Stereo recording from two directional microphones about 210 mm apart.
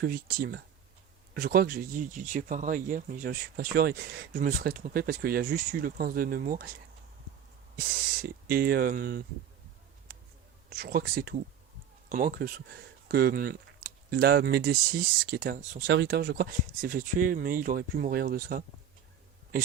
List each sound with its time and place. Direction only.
0.0 s speech: 45° right (ahead or behind)
7.8 s speech: 45° right (ahead or behind)
10.7 s speech: 45° right (ahead or behind)
15.9 s speech: 55° right (ahead or behind)